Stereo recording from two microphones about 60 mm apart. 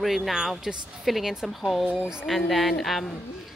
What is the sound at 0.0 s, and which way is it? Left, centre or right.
Speech, centre.